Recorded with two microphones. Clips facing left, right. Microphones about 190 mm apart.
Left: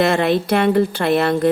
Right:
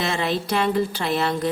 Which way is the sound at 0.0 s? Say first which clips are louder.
Left 8 dB; 60° left (ahead or behind).